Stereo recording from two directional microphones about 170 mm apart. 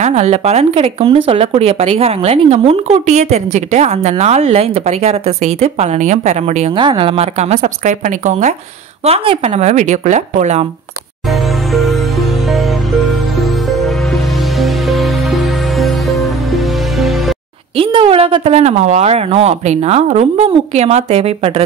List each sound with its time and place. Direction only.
0.0 s speech: 40° right (ahead or behind)
9.0 s speech: 35° right (ahead or behind)
11.7 s music: centre (ahead or behind)
17.7 s speech: 30° right (ahead or behind)